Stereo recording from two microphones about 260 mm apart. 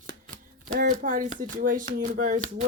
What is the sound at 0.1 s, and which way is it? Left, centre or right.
Speech, right.